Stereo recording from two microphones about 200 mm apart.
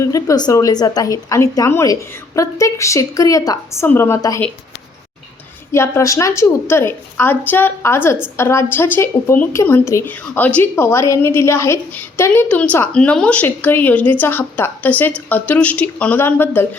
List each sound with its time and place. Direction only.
0.0 s a woman's voice: 15° left (ahead or behind)
5.7 s a woman's voice: 15° left (ahead or behind)